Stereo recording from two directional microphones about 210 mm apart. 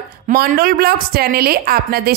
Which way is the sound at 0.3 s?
45° right (ahead or behind).